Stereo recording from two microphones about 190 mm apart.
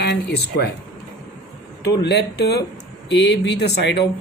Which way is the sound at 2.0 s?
60° left (ahead or behind).